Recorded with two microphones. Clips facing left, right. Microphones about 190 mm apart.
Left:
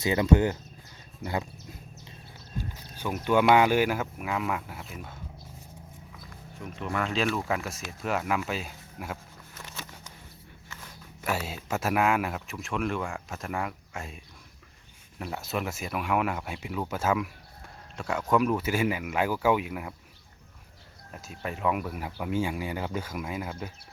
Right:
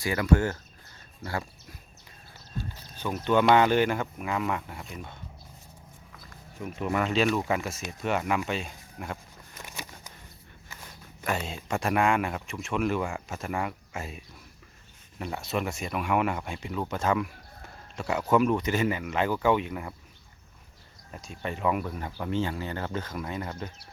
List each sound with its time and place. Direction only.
0.0 s speech: 20° left (ahead or behind)
2.6 s speech: 10° left (ahead or behind)
6.6 s speech: 5° right (ahead or behind)
9.6 s a sound: 15° right (ahead or behind)
11.2 s speech: 5° left (ahead or behind)
21.1 s speech: 5° left (ahead or behind)